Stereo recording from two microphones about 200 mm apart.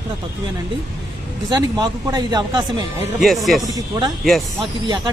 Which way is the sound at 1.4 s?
20° right (ahead or behind).